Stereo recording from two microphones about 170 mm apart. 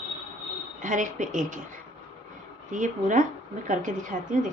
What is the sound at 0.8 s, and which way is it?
Speech, 50° right (ahead or behind).